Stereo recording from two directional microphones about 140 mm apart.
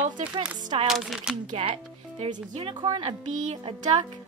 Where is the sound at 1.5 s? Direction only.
45° right (ahead or behind).